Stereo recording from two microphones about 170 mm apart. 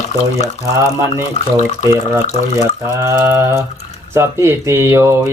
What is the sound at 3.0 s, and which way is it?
Speech, 15° right (ahead or behind).